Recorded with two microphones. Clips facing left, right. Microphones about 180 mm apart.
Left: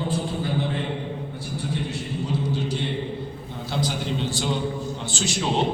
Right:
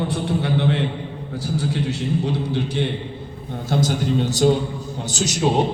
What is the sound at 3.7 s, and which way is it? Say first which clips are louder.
A man's voice: right 7 dB; 45° right (ahead or behind).